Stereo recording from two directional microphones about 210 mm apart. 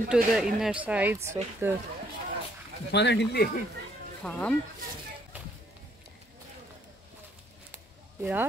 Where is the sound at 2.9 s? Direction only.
55° left (ahead or behind).